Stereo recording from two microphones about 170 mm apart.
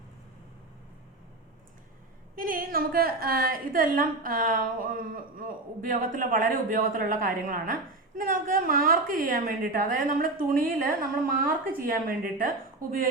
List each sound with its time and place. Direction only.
2.3 s a woman's voice: 55° right (ahead or behind)